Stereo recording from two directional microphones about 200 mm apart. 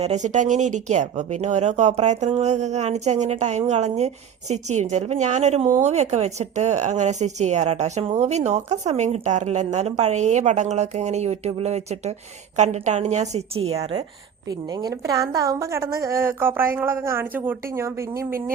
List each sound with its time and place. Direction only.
0.0 s speech: 35° right (ahead or behind)
14.7 s a woman's voice: 20° right (ahead or behind)